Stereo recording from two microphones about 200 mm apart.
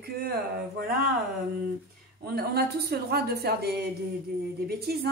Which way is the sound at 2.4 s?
50° right (ahead or behind).